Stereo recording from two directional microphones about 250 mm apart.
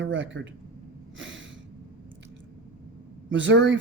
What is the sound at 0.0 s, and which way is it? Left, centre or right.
Speech, right.